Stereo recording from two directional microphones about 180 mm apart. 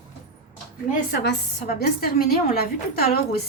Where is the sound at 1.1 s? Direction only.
60° left (ahead or behind).